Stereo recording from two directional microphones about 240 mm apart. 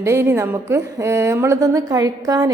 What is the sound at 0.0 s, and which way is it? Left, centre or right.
A woman's voice, centre.